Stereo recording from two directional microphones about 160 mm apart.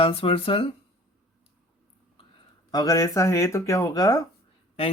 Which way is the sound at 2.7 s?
25° left (ahead or behind).